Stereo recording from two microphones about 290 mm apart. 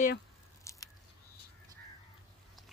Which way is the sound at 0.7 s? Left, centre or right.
Centre.